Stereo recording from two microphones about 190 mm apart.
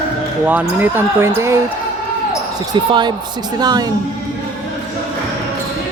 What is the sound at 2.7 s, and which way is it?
Speech, 25° right (ahead or behind).